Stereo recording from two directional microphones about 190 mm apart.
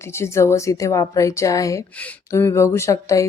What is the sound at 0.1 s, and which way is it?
A woman's voice, 15° left (ahead or behind).